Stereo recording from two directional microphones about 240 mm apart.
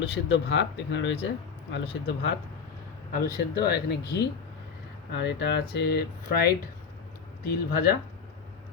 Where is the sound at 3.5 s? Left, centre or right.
Left.